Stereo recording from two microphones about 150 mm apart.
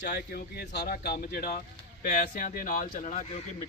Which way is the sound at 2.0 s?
65° left (ahead or behind).